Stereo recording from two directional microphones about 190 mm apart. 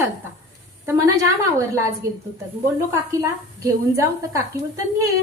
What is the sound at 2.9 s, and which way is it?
A woman's voice, 15° right (ahead or behind).